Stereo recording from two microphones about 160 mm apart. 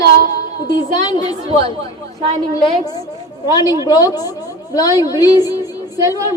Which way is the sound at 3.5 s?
25° left (ahead or behind).